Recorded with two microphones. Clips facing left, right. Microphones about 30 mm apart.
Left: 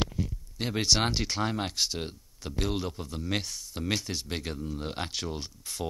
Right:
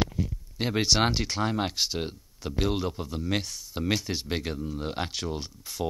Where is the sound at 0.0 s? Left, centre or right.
Centre.